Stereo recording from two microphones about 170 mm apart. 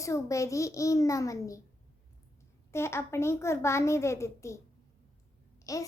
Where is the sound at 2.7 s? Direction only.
15° left (ahead or behind).